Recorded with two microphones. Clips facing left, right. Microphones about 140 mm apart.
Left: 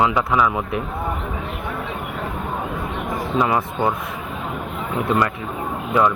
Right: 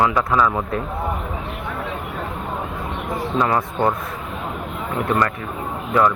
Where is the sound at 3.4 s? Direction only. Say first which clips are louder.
Even; 15° left (ahead or behind).